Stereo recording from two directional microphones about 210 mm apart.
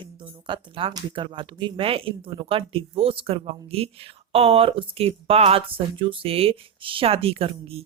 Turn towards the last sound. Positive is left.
turn(degrees=-25)  # may be behind; listen again after turning